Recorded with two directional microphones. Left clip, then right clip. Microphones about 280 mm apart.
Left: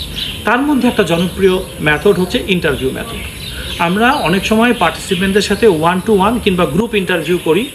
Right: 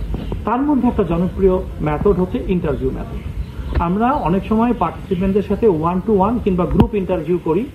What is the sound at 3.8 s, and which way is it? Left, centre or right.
Speech, left.